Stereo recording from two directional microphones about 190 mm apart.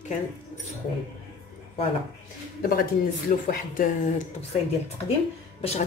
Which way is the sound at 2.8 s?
50° left (ahead or behind).